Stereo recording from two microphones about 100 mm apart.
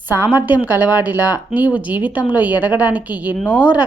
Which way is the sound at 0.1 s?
20° right (ahead or behind).